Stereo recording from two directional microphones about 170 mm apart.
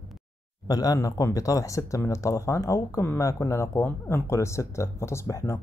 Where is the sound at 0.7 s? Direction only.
20° left (ahead or behind).